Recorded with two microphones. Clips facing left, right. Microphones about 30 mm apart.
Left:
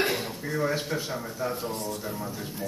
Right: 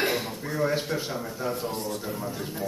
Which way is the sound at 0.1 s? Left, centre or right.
Centre.